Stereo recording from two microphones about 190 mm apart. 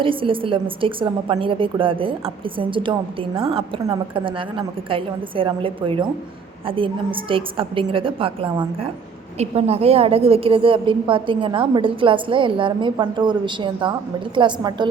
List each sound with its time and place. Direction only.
0.0 s a woman's voice: 25° right (ahead or behind)